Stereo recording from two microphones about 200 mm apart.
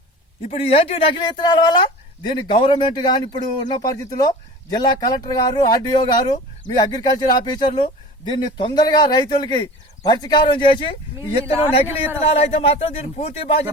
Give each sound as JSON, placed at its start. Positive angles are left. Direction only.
{"t": 0.4, "sound": "a man's voice", "side_deg": 30}